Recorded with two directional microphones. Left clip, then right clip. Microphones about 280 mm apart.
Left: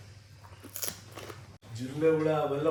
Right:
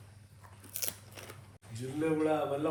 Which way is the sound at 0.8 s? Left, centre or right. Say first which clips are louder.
Left 2 dB; centre.